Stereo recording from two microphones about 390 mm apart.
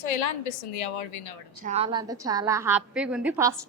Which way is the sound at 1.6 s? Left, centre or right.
Centre.